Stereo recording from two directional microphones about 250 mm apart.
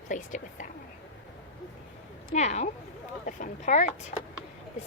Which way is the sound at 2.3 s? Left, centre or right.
Left.